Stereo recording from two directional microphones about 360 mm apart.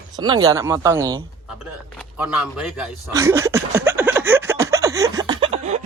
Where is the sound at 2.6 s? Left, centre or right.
Centre.